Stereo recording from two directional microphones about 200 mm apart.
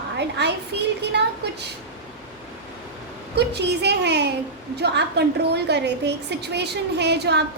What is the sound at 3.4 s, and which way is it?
A woman's voice, 55° right (ahead or behind).